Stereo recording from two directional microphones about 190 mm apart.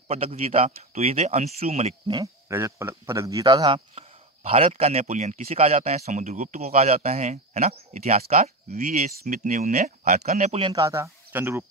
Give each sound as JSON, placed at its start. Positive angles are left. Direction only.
{"t": 0.1, "sound": "speech", "side_deg": -30}
{"t": 2.1, "sound": "speech", "side_deg": -15}
{"t": 3.9, "sound": "a sound", "side_deg": -35}
{"t": 4.7, "sound": "speech", "side_deg": -30}
{"t": 8.2, "sound": "speech", "side_deg": -50}
{"t": 10.7, "sound": "speech", "side_deg": -15}